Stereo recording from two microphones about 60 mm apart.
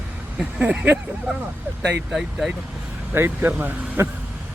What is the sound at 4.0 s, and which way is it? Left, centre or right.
Vehicle, right.